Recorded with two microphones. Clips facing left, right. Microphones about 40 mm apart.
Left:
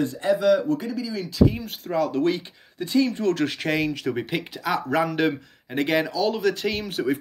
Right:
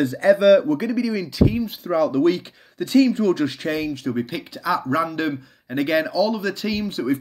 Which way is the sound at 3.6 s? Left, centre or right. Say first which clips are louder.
Even; left.